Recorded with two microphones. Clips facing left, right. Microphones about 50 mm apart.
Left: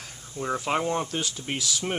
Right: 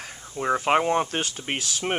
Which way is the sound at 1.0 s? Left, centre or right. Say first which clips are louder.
Right 2 dB; right.